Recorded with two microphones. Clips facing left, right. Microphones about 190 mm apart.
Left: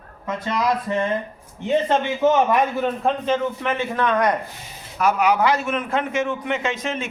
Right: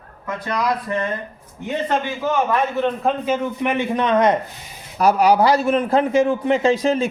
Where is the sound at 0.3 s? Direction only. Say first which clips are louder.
Left 1 dB; 25° left (ahead or behind).